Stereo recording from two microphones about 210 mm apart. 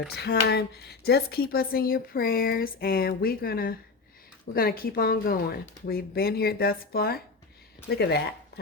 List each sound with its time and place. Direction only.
0.1 s speech: 50° left (ahead or behind)